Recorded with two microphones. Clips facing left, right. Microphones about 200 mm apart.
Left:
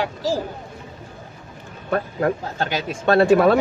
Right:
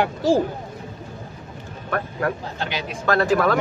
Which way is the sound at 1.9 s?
25° left (ahead or behind).